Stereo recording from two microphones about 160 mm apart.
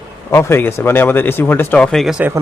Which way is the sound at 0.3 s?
15° left (ahead or behind).